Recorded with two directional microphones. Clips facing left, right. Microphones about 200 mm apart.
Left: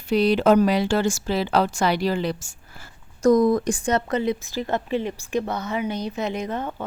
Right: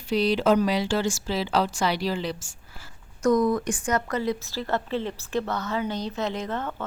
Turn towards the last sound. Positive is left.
turn(degrees=15)  # may be behind; listen again after turning